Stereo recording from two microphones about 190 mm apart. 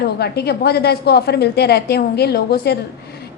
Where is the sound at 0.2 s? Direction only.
55° left (ahead or behind).